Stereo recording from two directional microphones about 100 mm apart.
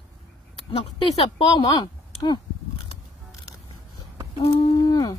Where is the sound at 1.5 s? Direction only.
45° left (ahead or behind).